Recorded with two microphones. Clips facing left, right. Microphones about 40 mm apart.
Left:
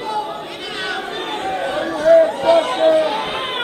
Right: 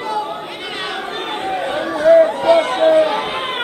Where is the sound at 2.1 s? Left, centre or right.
Right.